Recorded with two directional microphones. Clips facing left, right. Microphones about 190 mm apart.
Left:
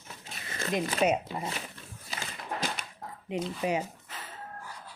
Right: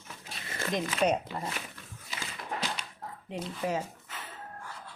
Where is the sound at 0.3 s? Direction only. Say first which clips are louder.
Right 1 dB; 25° left (ahead or behind).